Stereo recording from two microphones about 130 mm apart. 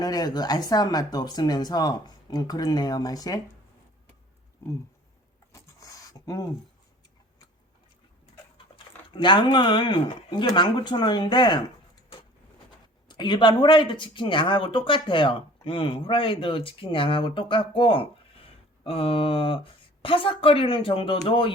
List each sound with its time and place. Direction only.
0.0 s speech: 30° left (ahead or behind)
5.5 s a sound: 25° left (ahead or behind)
8.5 s speech: 40° left (ahead or behind)
13.1 s speech: 35° left (ahead or behind)